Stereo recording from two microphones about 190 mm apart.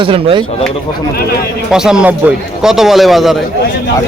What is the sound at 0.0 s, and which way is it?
Speech, 30° right (ahead or behind).